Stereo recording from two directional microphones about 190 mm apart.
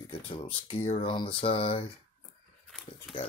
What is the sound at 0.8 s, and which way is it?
Speech, 30° left (ahead or behind).